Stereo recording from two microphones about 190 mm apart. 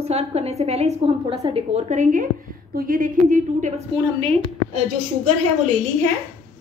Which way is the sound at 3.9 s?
30° right (ahead or behind).